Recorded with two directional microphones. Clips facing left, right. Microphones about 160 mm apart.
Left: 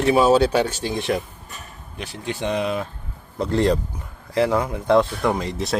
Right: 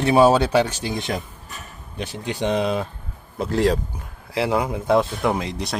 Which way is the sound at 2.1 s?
20° right (ahead or behind).